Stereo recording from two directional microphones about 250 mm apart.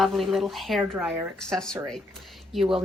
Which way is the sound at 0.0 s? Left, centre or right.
Centre.